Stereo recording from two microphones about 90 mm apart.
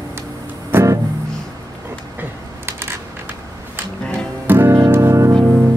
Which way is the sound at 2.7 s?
25° right (ahead or behind).